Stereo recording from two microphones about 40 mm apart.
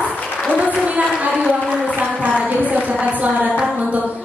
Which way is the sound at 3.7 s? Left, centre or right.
Right.